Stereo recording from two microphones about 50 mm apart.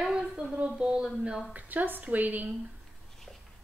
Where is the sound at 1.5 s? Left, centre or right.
Right.